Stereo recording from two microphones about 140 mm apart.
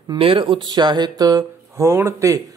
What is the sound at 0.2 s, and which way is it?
Speech, 40° right (ahead or behind).